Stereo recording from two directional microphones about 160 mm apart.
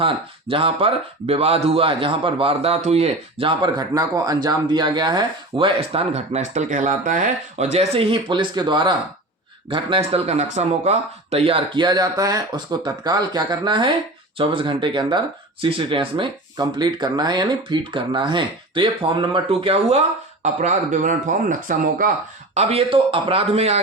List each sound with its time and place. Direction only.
0.0 s speech: 35° right (ahead or behind)
20.4 s speech: 50° right (ahead or behind)
22.5 s speech: 35° right (ahead or behind)